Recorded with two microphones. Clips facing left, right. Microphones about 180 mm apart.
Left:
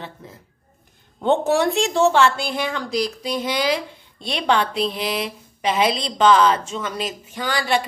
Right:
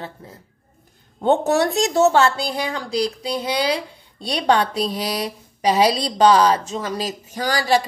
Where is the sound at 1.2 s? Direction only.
40° right (ahead or behind).